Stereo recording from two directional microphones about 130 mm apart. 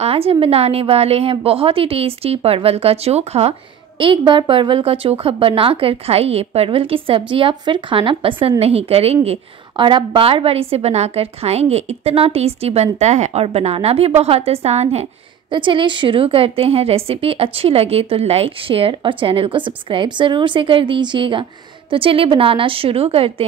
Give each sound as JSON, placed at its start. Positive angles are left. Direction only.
{"t": 0.0, "sound": "a woman's voice", "side_deg": -50}
{"t": 4.3, "sound": "a woman's voice", "side_deg": -40}
{"t": 9.8, "sound": "a woman's voice", "side_deg": -40}
{"t": 15.5, "sound": "a woman's voice", "side_deg": -40}